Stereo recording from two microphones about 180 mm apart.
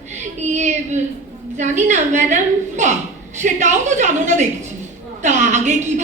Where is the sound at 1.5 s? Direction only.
40° right (ahead or behind).